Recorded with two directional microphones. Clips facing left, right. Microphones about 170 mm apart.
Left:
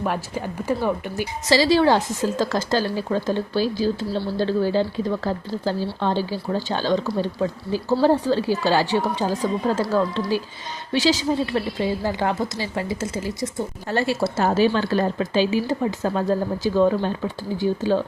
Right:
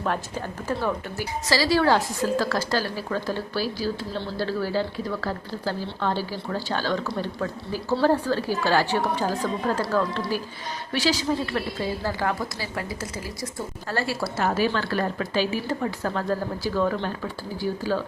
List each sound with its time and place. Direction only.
0.0 s speech: 10° left (ahead or behind)
11.5 s speech: 20° left (ahead or behind)